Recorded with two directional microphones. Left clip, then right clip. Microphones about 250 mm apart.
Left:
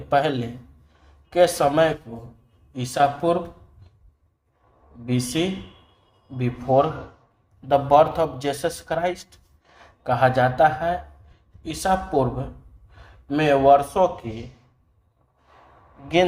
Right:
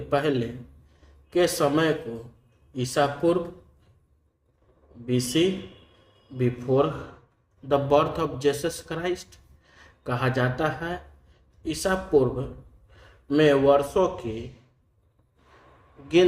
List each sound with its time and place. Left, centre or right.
0.1 s a man's voice: centre
5.0 s a man's voice: centre
13.2 s speech: centre